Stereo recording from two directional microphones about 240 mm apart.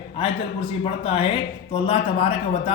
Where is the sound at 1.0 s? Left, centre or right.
Left.